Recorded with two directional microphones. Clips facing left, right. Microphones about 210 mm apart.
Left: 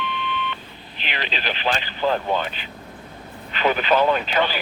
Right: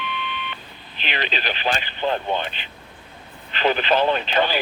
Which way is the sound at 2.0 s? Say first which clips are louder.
Left 2 dB; 25° right (ahead or behind).